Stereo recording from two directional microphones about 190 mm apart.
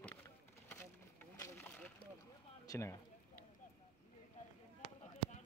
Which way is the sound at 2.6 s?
15° left (ahead or behind).